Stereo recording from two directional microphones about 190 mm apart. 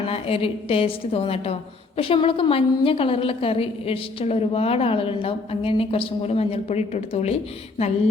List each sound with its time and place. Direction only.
0.1 s a woman's voice: 30° left (ahead or behind)